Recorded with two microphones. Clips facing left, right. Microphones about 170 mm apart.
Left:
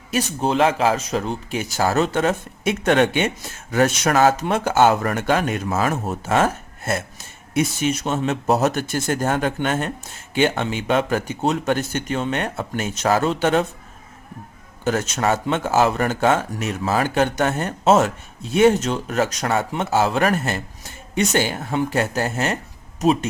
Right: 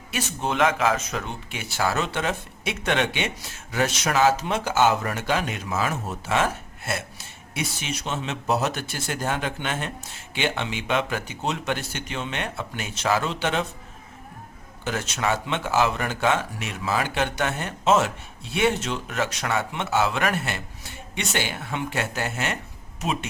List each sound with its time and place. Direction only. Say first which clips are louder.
0.1 s speech: left 7 dB; 35° left (ahead or behind)
14.8 s speech: left 6 dB; 45° left (ahead or behind)